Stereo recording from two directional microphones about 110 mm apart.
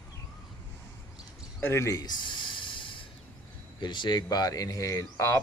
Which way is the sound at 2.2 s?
45° left (ahead or behind).